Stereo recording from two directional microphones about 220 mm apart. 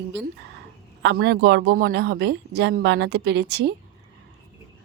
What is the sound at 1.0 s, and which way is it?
A woman's voice, 50° right (ahead or behind).